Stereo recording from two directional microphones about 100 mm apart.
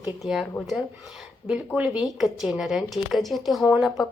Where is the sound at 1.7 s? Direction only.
15° right (ahead or behind).